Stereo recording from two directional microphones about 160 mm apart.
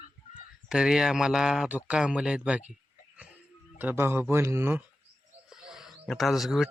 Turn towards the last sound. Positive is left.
turn(degrees=0)  # may be behind; listen again after turning